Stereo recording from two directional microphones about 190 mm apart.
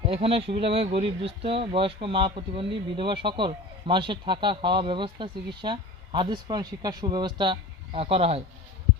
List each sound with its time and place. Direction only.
0.1 s speech: 30° right (ahead or behind)